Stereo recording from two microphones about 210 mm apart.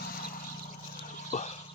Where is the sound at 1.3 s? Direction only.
35° left (ahead or behind).